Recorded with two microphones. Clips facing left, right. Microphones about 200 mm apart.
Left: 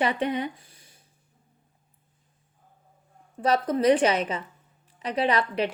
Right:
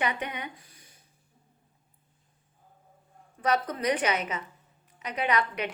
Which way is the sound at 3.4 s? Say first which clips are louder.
Left 6 dB; 30° left (ahead or behind).